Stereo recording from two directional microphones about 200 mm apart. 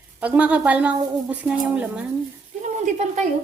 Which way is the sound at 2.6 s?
35° right (ahead or behind).